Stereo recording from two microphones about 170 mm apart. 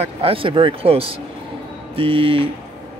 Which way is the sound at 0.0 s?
35° right (ahead or behind).